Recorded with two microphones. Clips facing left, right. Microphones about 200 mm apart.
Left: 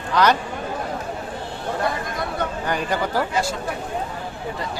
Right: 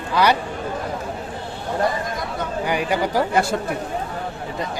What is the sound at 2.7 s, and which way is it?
Speech, 10° right (ahead or behind).